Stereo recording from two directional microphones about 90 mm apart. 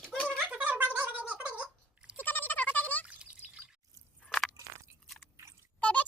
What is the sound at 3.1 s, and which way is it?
Drip, 15° right (ahead or behind).